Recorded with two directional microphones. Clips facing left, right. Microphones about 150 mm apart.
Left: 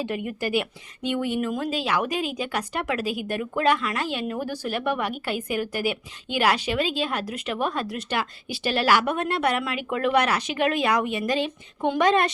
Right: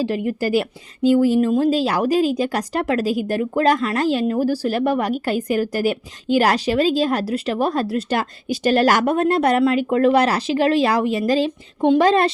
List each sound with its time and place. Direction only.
0.0 s a woman's voice: 35° right (ahead or behind)